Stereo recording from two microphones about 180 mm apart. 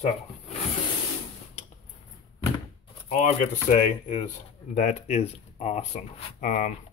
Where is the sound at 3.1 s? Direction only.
40° left (ahead or behind).